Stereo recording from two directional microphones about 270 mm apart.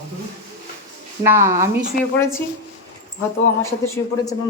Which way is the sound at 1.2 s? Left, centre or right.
Centre.